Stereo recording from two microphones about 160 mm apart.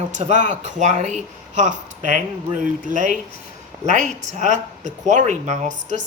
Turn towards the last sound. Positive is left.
turn(degrees=-50)  # may be behind; listen again after turning